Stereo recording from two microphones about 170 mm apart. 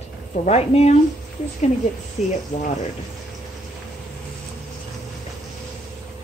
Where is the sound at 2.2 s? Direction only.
45° left (ahead or behind).